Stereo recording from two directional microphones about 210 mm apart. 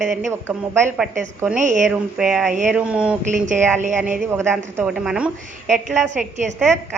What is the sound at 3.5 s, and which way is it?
Speech, 35° right (ahead or behind).